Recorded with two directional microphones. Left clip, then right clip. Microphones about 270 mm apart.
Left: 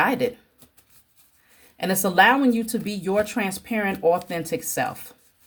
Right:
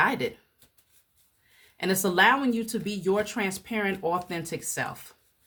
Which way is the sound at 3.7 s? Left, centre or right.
Right.